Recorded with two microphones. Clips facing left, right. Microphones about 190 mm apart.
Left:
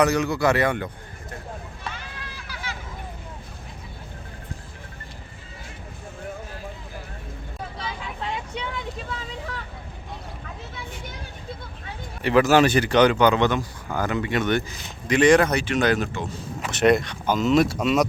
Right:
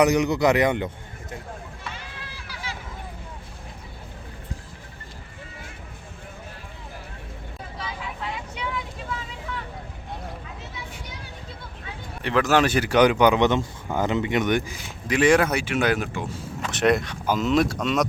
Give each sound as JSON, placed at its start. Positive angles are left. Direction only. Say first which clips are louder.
{"t": 0.0, "sound": "speech", "louder": "right 1 dB", "side_deg": -15}
{"t": 7.8, "sound": "vehicle", "louder": "right 1 dB", "side_deg": 30}
{"t": 12.2, "sound": "speech", "louder": "left 3 dB", "side_deg": 5}
{"t": 16.6, "sound": "speech", "louder": "left 2 dB", "side_deg": 5}